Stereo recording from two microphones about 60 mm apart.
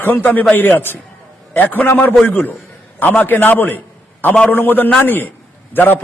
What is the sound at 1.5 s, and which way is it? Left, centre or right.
A man's voice, left.